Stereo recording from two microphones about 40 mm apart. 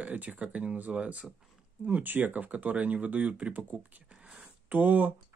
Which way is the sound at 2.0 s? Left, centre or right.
Right.